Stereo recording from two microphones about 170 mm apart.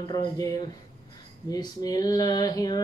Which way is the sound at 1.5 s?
20° left (ahead or behind).